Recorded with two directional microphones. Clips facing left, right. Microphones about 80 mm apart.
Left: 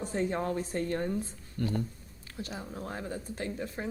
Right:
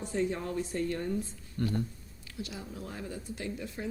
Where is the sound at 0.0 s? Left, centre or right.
Left.